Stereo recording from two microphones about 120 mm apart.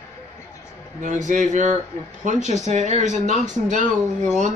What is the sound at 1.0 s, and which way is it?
Speech, 90° right.